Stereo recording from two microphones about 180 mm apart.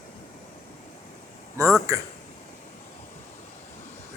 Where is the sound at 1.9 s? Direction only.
15° right (ahead or behind).